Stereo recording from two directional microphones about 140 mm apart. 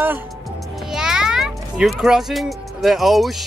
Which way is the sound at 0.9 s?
5° right (ahead or behind).